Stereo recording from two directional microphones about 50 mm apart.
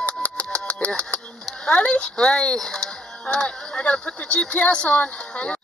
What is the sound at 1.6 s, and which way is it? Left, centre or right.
Speech, left.